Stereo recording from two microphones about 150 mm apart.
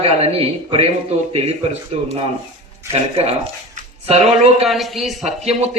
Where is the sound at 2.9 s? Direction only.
45° right (ahead or behind).